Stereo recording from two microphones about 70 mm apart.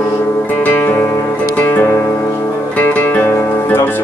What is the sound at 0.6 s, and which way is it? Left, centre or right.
Music, left.